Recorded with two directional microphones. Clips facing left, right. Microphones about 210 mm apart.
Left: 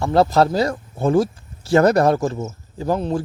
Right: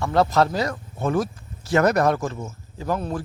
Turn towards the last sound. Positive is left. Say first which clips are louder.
# left 5 dB
turn(degrees=25)  # may be behind; listen again after turning